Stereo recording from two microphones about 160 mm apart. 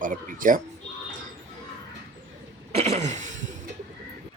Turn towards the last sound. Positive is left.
turn(degrees=-50)  # may be behind; listen again after turning